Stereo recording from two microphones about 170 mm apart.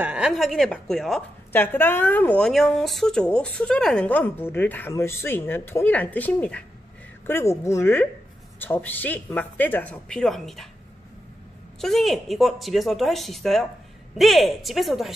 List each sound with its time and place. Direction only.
0.0 s a woman's voice: 5° right (ahead or behind)
11.8 s speech: centre (ahead or behind)